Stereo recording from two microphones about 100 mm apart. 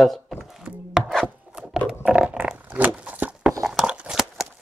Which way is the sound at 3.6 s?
5° right (ahead or behind).